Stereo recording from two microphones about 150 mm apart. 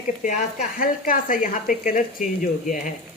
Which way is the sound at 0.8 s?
65° left (ahead or behind).